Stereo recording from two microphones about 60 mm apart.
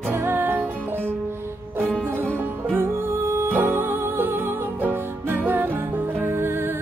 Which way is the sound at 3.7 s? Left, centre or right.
Right.